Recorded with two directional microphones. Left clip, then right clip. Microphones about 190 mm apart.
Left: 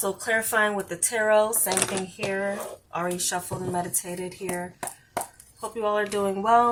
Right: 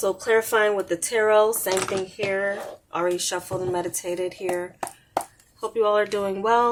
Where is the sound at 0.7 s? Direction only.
45° right (ahead or behind).